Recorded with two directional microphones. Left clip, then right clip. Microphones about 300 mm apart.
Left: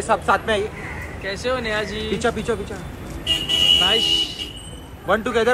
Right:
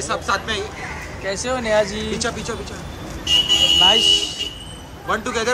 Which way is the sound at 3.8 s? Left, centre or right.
Right.